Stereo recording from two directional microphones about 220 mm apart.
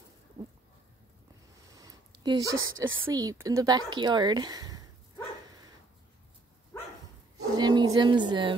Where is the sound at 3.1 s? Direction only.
15° right (ahead or behind).